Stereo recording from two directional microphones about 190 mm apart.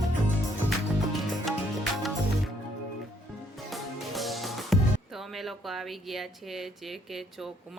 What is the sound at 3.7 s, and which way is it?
Music, centre (ahead or behind).